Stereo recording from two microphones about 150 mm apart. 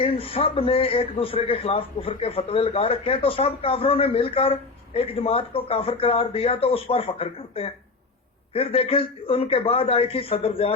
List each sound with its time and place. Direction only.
0.0 s a man's voice: 40° left (ahead or behind)